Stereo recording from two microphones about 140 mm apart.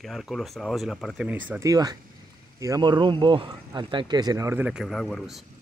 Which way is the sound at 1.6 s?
25° right (ahead or behind).